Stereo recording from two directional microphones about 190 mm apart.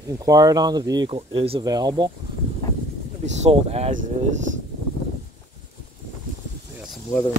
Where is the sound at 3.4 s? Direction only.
35° right (ahead or behind).